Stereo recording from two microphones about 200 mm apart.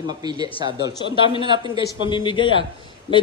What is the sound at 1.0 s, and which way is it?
Speech, 25° left (ahead or behind).